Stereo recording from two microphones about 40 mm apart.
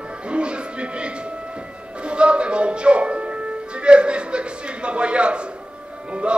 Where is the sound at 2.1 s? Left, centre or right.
Right.